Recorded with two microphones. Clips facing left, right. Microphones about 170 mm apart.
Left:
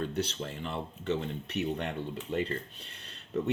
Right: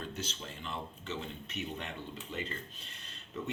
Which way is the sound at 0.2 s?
65° left (ahead or behind).